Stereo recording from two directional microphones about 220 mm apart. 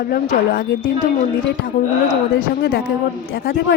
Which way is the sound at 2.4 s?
45° left (ahead or behind).